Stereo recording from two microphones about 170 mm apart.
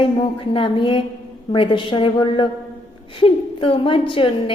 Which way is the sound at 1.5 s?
30° left (ahead or behind).